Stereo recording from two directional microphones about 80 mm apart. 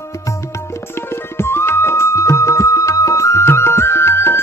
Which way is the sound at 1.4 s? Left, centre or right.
Left.